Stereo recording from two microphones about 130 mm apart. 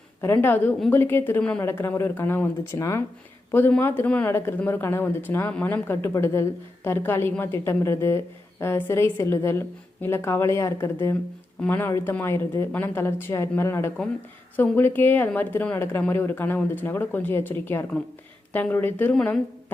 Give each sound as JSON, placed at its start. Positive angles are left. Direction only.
{"t": 0.2, "sound": "a woman's voice", "side_deg": 15}